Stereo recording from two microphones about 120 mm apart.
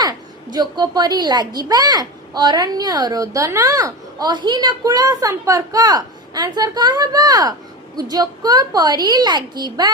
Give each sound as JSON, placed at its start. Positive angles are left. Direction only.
{"t": 0.0, "sound": "a child's voice", "side_deg": -35}